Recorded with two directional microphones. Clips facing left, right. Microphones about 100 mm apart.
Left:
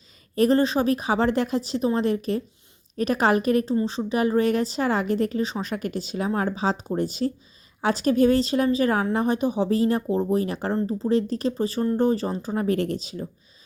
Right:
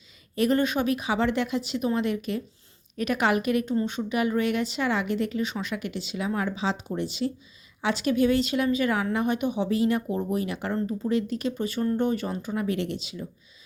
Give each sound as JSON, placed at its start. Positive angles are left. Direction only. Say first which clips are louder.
{"t": 0.3, "sound": "a woman's voice", "louder": "left 4 dB", "side_deg": 35}